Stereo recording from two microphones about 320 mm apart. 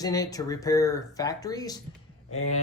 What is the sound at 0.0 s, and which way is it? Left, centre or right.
Speech, centre.